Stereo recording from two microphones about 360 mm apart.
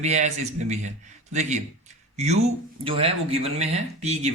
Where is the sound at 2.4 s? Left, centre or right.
Centre.